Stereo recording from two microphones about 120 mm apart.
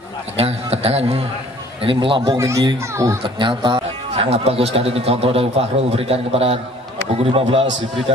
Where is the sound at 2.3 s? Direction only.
25° right (ahead or behind).